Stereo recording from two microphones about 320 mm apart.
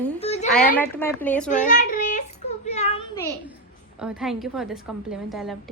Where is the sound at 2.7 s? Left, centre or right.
Centre.